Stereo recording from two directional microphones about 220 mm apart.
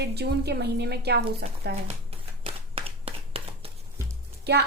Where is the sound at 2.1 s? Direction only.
25° right (ahead or behind).